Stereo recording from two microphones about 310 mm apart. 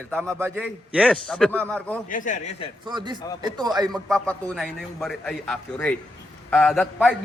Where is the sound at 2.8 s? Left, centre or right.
Centre.